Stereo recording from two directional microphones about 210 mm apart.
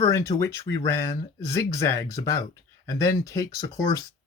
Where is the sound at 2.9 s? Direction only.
15° left (ahead or behind).